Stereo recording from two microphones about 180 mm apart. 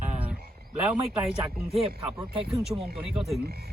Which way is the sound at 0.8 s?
5° right (ahead or behind).